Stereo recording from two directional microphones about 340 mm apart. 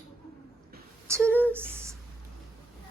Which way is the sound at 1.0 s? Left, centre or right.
Centre.